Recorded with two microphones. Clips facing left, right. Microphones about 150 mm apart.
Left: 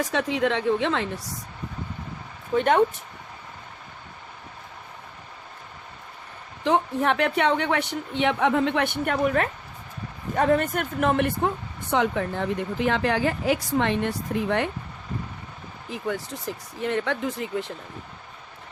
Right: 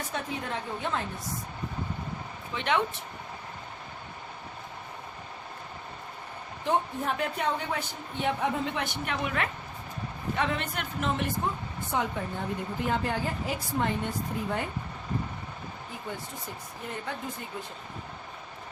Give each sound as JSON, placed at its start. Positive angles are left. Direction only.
{"t": 0.0, "sound": "a woman's voice", "side_deg": 90}
{"t": 2.5, "sound": "speech", "side_deg": 45}
{"t": 6.7, "sound": "a woman's voice", "side_deg": 85}
{"t": 11.9, "sound": "a woman's voice", "side_deg": 90}
{"t": 15.9, "sound": "a woman's voice", "side_deg": 90}